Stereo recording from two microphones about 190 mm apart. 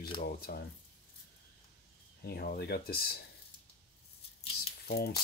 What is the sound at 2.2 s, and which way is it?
Speech, 55° left (ahead or behind).